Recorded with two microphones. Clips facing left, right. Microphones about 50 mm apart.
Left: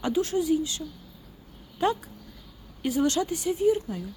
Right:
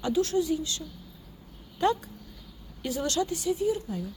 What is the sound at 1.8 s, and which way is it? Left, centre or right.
Speech, centre.